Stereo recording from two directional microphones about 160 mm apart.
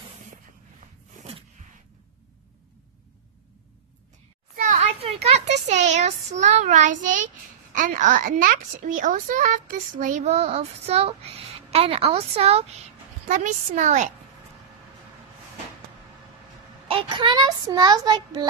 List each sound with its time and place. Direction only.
4.6 s a sound: 40° right (ahead or behind)
7.7 s a woman's voice: 55° right (ahead or behind); by 12.6 s 40° right (ahead or behind)
13.3 s a woman's voice: 50° right (ahead or behind)
16.8 s a child's voice: 30° right (ahead or behind)